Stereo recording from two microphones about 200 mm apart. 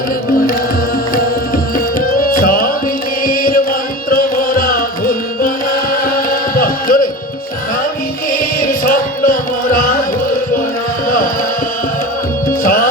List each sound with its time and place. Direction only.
2.0 s music: 45° left (ahead or behind)
8.3 s music: 45° left (ahead or behind)
12.6 s music: 45° left (ahead or behind)